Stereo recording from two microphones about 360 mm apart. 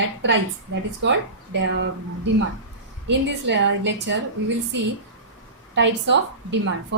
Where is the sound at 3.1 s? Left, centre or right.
Right.